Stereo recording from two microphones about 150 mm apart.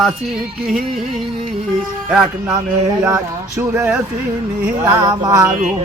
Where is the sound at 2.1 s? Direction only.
5° right (ahead or behind).